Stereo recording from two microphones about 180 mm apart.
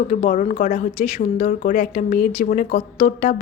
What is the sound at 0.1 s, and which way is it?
A woman's voice, 40° left (ahead or behind).